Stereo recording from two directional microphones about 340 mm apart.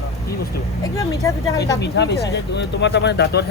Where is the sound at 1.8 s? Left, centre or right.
Left.